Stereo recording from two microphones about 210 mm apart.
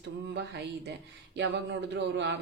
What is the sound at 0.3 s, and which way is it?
Speech, 55° right (ahead or behind).